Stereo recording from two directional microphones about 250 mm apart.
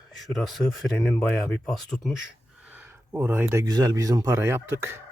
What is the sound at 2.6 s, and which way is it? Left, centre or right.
Speech, centre.